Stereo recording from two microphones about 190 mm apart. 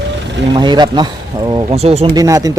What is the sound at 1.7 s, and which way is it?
Speech, 35° right (ahead or behind).